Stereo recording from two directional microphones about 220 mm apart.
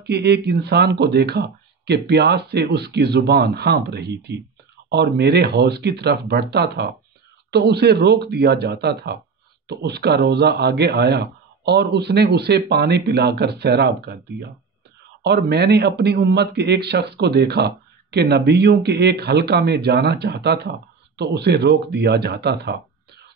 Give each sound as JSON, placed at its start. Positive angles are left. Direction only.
{"t": 0.0, "sound": "a man's voice", "side_deg": -50}